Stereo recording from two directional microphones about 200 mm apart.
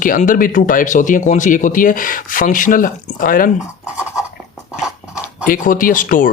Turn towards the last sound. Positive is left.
turn(degrees=40)  # may be behind; listen again after turning